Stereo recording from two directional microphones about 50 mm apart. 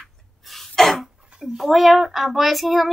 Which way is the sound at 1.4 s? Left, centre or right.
Centre.